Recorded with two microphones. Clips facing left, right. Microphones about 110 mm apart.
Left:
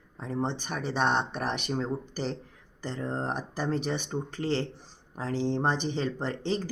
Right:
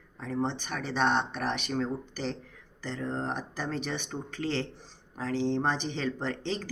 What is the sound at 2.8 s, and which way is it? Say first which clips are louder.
Speech: left 1 dB; 40° left (ahead or behind).